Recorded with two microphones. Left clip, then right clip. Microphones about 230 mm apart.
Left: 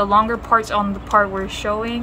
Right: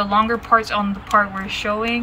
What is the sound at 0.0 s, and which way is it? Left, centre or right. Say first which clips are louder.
Speech: left 2 dB; left.